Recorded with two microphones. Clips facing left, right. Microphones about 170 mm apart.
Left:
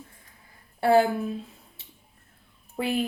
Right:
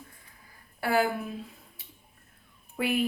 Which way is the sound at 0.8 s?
30° left (ahead or behind).